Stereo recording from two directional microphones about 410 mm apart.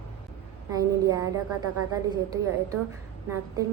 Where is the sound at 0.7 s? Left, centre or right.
Centre.